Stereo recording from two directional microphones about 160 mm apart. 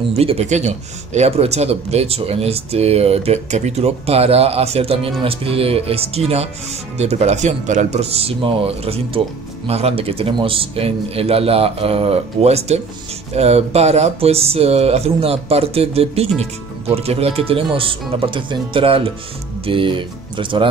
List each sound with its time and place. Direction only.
0.1 s speech: 40° right (ahead or behind)